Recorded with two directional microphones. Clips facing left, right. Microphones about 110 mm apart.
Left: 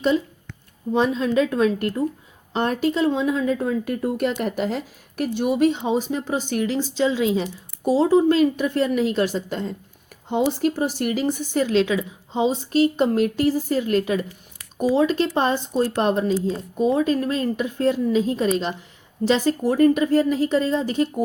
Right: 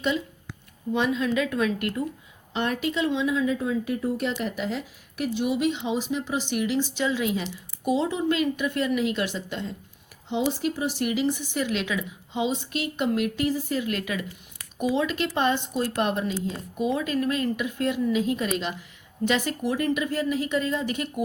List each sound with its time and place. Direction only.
0.9 s speech: 35° left (ahead or behind)
11.6 s speech: 30° left (ahead or behind)